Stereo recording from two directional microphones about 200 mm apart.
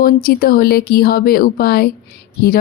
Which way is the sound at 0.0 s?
45° left (ahead or behind).